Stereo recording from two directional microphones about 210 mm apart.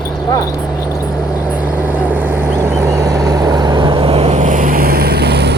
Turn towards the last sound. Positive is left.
turn(degrees=-50)  # may be behind; listen again after turning